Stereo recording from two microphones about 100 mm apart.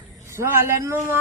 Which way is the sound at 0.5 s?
30° right (ahead or behind).